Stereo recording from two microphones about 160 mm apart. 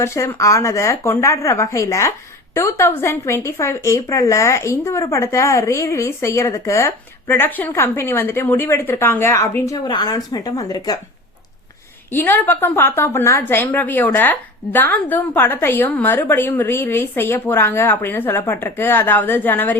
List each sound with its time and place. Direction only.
0.0 s speech: 15° left (ahead or behind)
12.1 s speech: 10° left (ahead or behind)